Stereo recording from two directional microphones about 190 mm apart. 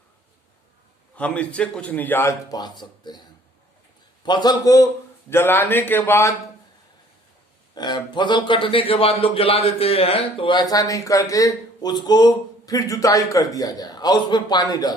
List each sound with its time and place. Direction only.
1.1 s a man's voice: 5° left (ahead or behind)
7.8 s a man's voice: 20° left (ahead or behind)